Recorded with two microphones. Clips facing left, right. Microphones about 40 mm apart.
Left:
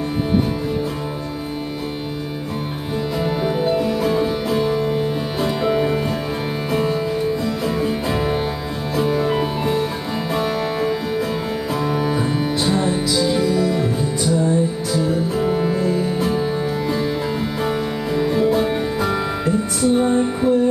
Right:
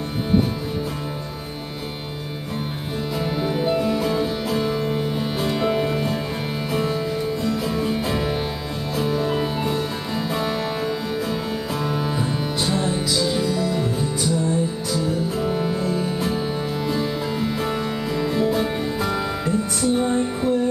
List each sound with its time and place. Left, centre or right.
3.3 s music: centre